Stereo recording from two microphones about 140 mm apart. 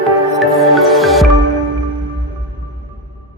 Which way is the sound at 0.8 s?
Centre (ahead or behind).